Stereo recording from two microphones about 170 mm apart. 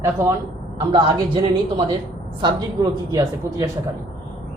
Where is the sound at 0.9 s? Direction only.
30° right (ahead or behind).